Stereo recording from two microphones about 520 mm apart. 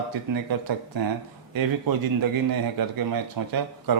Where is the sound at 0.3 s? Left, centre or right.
Right.